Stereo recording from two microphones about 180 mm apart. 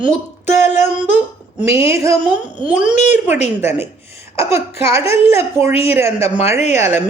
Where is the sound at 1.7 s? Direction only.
15° right (ahead or behind).